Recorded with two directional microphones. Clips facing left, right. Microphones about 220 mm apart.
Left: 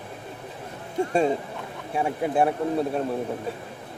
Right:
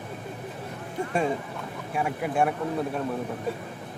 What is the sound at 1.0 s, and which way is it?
Speech, 30° left (ahead or behind).